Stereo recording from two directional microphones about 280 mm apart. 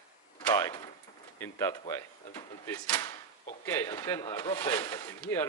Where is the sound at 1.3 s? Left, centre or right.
Centre.